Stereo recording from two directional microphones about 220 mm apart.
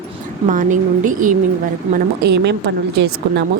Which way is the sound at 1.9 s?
50° right (ahead or behind).